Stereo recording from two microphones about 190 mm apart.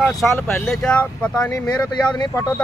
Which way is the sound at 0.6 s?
5° left (ahead or behind).